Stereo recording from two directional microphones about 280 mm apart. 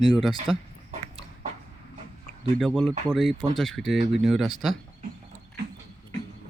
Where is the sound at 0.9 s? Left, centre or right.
Right.